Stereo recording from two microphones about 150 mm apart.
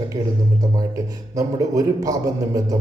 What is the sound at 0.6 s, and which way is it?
A man's voice, 25° right (ahead or behind).